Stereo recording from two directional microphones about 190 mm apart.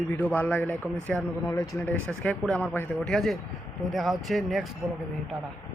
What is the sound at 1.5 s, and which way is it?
Speech, 20° left (ahead or behind).